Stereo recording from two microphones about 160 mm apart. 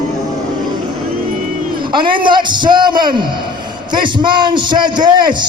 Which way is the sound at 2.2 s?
30° right (ahead or behind).